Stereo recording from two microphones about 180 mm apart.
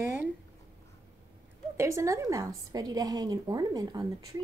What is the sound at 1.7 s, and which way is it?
A woman's voice, 15° right (ahead or behind).